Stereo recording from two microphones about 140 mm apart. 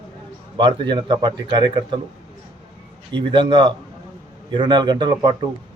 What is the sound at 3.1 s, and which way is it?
Speech, 35° right (ahead or behind).